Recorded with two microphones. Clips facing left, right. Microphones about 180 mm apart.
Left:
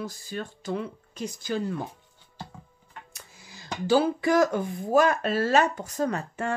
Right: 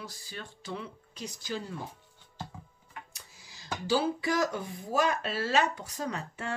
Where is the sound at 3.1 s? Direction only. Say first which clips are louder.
Left 6 dB; 55° left (ahead or behind).